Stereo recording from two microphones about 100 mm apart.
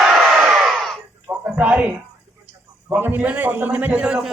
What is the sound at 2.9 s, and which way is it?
A man's voice, 20° right (ahead or behind).